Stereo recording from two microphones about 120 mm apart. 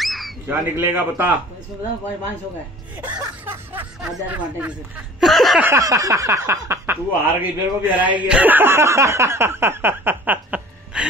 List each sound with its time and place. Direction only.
0.0 s squawk: centre (ahead or behind)
0.5 s speech: 15° right (ahead or behind)
3.0 s music: 15° right (ahead or behind)
4.0 s speech: 10° right (ahead or behind)
5.2 s snicker: centre (ahead or behind)
5.6 s speech: 25° right (ahead or behind)